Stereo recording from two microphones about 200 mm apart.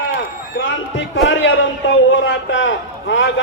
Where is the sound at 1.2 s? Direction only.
65° left (ahead or behind).